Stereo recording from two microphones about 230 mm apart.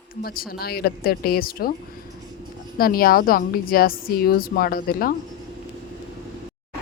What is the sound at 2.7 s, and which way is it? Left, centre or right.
Speech, left.